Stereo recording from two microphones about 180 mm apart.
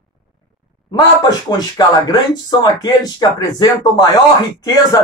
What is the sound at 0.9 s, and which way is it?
Speech, 20° left (ahead or behind).